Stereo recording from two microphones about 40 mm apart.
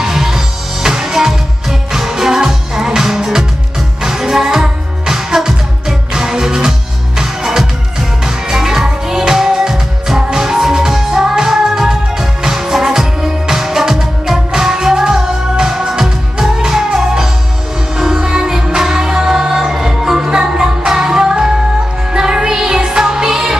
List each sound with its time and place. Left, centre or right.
0.0 s music: centre